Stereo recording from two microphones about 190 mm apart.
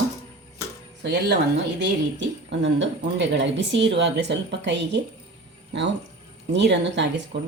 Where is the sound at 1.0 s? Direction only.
60° right (ahead or behind).